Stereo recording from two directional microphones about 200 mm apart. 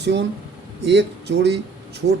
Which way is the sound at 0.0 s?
60° right (ahead or behind).